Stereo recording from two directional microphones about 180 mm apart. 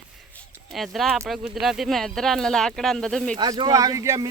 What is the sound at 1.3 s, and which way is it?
Speech, centre (ahead or behind).